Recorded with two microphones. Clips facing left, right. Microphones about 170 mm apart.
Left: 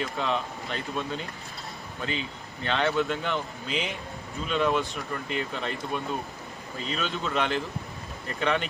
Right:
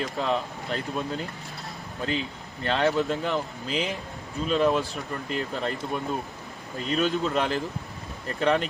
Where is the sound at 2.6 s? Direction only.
40° right (ahead or behind).